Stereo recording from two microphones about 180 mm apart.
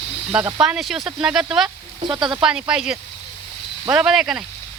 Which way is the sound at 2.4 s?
5° right (ahead or behind).